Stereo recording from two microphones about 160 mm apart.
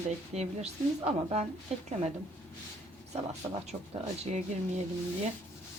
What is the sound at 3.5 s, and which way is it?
Speech, 40° right (ahead or behind).